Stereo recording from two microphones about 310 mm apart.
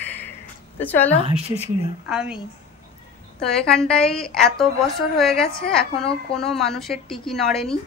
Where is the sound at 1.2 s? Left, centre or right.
Centre.